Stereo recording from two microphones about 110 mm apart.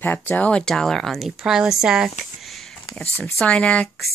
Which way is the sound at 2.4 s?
Centre (ahead or behind).